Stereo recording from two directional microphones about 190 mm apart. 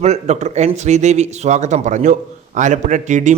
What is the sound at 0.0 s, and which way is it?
A man's voice, 35° right (ahead or behind).